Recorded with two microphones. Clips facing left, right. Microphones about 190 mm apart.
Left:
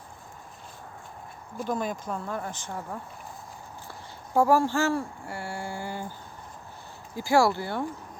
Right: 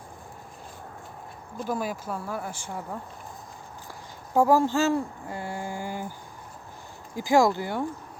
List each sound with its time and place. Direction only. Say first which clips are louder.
1.6 s speech: even; 5° right (ahead or behind)
4.4 s speech: right 1 dB; 15° right (ahead or behind)
7.2 s speech: right 1 dB; 15° right (ahead or behind)